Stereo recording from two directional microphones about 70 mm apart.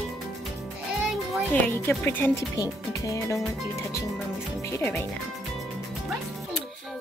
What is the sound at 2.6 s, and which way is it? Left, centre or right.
Speech, left.